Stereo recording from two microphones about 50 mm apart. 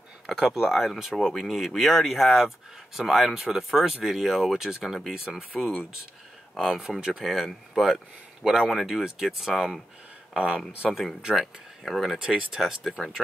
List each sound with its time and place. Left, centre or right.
0.5 s speech: centre
4.8 s speech: centre
5.1 s speech: centre
10.9 s speech: centre